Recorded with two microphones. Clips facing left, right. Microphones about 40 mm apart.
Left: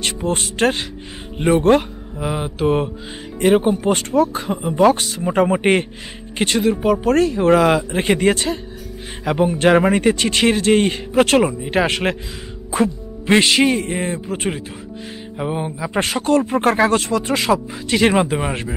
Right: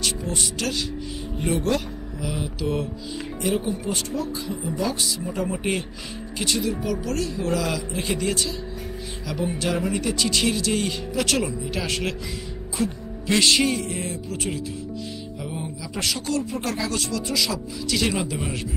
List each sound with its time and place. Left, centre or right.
0.0 s speech: left